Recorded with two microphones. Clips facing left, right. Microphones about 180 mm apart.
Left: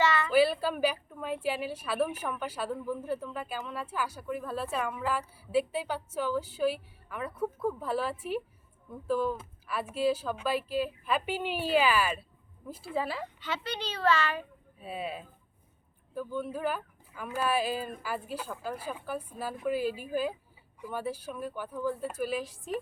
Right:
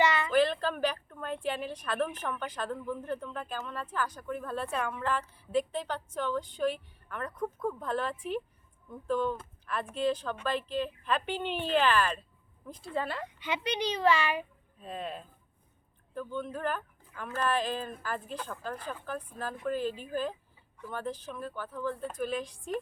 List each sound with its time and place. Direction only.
0.0 s a sound: 15° right (ahead or behind)
0.3 s a woman's voice: 10° left (ahead or behind)
13.4 s a child's voice: 15° right (ahead or behind)
14.8 s a woman's voice: 5° left (ahead or behind)